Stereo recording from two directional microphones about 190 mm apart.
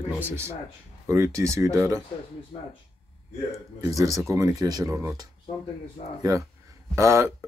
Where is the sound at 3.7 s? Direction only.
15° right (ahead or behind).